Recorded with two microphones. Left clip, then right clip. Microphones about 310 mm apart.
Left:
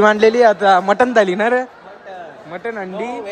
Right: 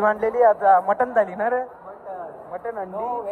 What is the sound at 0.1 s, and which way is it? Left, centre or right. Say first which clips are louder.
A man's voice: left 6 dB; left.